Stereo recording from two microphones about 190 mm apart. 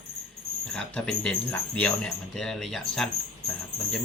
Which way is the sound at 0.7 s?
5° left (ahead or behind).